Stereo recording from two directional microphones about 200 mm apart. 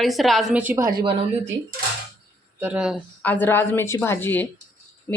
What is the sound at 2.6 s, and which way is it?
Speech, 5° right (ahead or behind).